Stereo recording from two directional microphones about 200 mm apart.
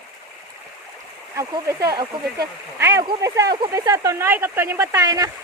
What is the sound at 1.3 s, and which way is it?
Speech, 15° right (ahead or behind).